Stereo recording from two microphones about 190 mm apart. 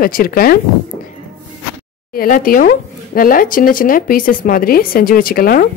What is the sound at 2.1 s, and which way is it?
A woman's voice, 50° left (ahead or behind).